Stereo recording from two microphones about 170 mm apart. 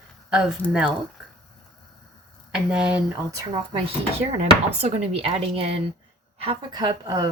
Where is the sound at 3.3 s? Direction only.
25° right (ahead or behind).